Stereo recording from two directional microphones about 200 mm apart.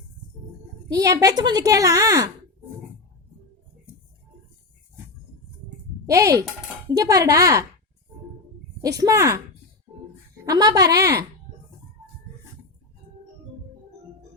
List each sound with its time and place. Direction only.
0.9 s a child's voice: 15° right (ahead or behind)
6.1 s a child's voice: 15° right (ahead or behind)
9.0 s a child's voice: 15° right (ahead or behind)
9.9 s music: 25° right (ahead or behind)
10.4 s a child's voice: 20° right (ahead or behind)